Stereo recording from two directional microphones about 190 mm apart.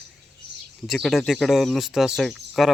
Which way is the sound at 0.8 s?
Centre (ahead or behind).